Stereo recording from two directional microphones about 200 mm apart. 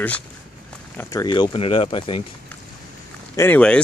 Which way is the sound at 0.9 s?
20° left (ahead or behind).